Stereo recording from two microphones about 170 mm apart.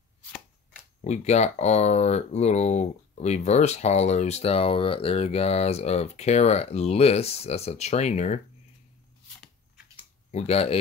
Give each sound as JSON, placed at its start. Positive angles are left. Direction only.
{"t": 1.0, "sound": "speech", "side_deg": 40}
{"t": 10.3, "sound": "speech", "side_deg": 35}